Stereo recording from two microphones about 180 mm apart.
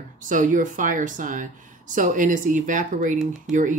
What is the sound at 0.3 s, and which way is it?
Speech, 45° right (ahead or behind).